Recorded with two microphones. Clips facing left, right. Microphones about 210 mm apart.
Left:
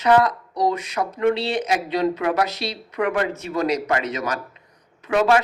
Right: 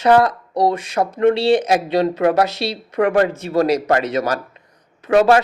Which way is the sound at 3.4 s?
35° right (ahead or behind).